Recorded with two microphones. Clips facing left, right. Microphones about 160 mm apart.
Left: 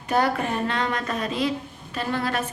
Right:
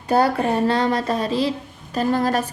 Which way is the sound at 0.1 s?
35° right (ahead or behind).